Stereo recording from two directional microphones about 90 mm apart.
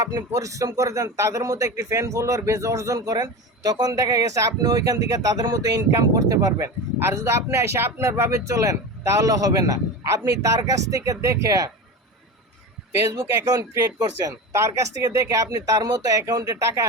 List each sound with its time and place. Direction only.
0.0 s a man's voice: 45° right (ahead or behind)
7.0 s a man's voice: 30° right (ahead or behind)
13.4 s a man's voice: 40° right (ahead or behind)